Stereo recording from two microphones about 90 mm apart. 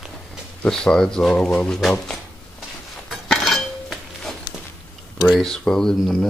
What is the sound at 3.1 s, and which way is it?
Dishes, centre (ahead or behind).